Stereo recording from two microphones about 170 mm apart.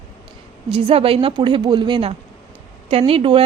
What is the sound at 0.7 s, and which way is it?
Speech, 35° right (ahead or behind).